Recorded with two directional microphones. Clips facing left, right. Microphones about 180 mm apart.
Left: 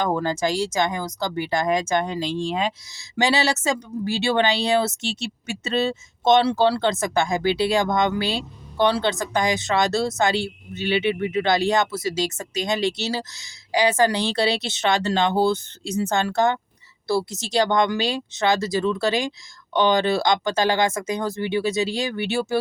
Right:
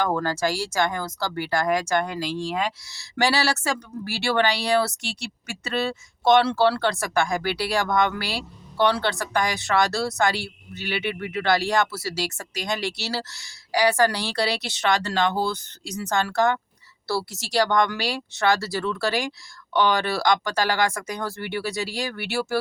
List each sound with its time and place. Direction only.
0.0 s speech: 20° left (ahead or behind)